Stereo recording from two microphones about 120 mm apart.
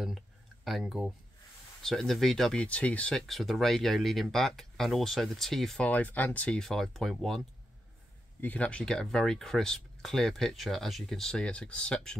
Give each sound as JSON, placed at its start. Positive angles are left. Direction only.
{"t": 0.7, "sound": "speech", "side_deg": 0}